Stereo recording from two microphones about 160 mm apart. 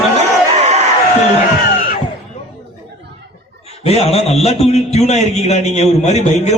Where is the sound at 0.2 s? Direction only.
45° right (ahead or behind).